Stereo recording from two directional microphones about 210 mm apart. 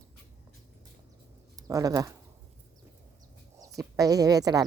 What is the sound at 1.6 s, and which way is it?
Speech, 15° right (ahead or behind).